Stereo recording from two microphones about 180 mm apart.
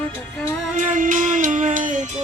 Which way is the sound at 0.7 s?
45° right (ahead or behind).